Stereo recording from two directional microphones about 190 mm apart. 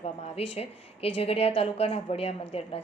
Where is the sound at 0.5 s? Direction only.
30° left (ahead or behind).